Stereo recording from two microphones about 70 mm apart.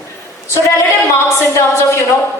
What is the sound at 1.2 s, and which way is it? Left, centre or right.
Speech, left.